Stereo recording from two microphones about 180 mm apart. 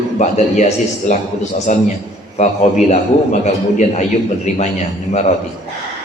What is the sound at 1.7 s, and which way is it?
A man's voice, 45° left (ahead or behind).